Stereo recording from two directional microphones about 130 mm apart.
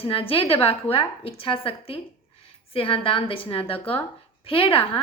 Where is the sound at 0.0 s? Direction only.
45° left (ahead or behind).